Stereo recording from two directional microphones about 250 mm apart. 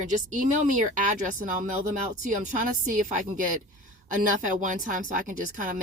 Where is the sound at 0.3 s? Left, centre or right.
Right.